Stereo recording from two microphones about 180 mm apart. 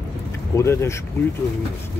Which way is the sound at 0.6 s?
15° left (ahead or behind).